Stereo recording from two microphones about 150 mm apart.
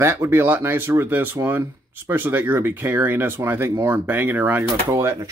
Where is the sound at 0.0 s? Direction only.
20° right (ahead or behind).